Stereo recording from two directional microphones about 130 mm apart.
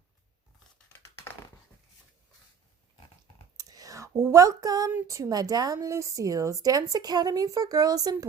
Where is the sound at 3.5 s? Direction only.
30° right (ahead or behind).